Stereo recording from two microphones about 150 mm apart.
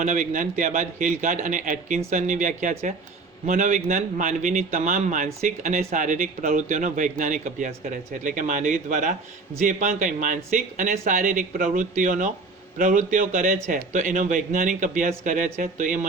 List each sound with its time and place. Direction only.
0.0 s a man's voice: 60° right (ahead or behind)